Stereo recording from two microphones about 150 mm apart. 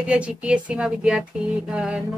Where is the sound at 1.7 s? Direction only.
5° right (ahead or behind).